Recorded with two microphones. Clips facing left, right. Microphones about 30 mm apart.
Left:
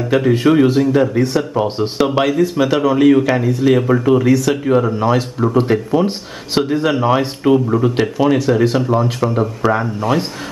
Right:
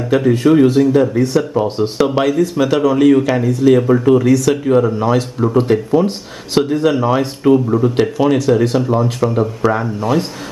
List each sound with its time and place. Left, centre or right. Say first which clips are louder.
0.1 s speech: right 1 dB; centre
8.0 s speech: right 1 dB; centre